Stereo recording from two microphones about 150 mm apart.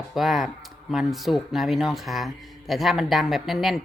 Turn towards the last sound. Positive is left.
turn(degrees=0)  # may be behind; listen again after turning